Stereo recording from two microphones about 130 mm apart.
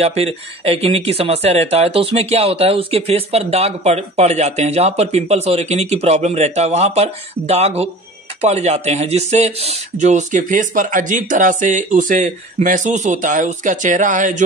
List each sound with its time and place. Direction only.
0.0 s speech: 50° right (ahead or behind)
9.9 s speech: 70° right (ahead or behind)